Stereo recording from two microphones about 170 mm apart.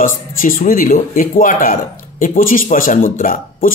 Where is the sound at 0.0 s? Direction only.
55° left (ahead or behind).